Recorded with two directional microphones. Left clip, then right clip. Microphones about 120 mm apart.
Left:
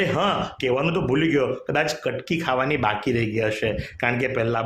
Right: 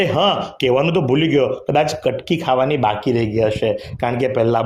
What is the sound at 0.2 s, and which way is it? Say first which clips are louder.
Speech: right 6 dB; 35° right (ahead or behind).